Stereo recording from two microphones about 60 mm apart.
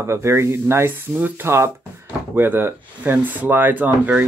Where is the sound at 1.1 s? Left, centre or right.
Right.